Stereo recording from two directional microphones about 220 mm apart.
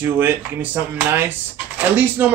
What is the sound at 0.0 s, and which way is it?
Speech, 10° right (ahead or behind).